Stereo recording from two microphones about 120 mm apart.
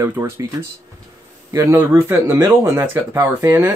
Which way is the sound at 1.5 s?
20° right (ahead or behind).